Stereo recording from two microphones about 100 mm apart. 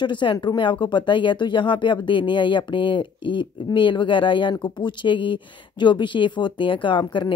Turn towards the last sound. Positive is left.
turn(degrees=55)  # may be behind; listen again after turning